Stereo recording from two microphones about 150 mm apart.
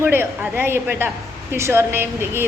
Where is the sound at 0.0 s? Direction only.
15° right (ahead or behind).